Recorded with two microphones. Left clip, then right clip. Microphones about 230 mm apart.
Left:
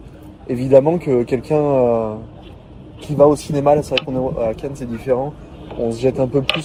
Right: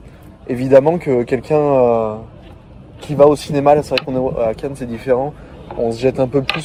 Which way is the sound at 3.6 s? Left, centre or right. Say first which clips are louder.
Right 2 dB; right.